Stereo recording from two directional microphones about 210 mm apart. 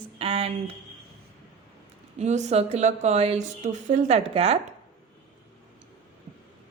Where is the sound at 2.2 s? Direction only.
35° right (ahead or behind).